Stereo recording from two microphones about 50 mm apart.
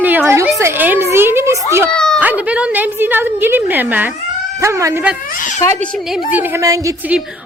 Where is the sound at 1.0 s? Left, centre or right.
Right.